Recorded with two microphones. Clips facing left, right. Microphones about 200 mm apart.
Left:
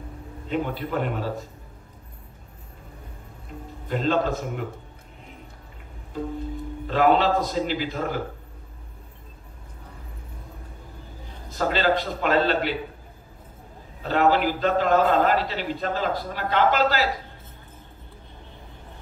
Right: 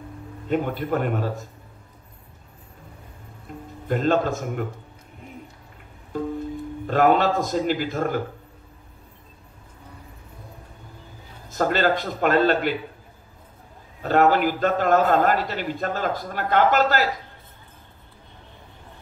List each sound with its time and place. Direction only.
0.5 s a man's voice: 45° right (ahead or behind)
3.9 s a man's voice: 50° right (ahead or behind)
6.1 s a man's voice: 50° right (ahead or behind)
11.5 s a man's voice: 50° right (ahead or behind)
14.0 s a man's voice: 50° right (ahead or behind)